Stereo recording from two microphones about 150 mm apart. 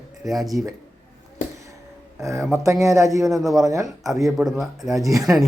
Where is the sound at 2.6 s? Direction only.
20° right (ahead or behind).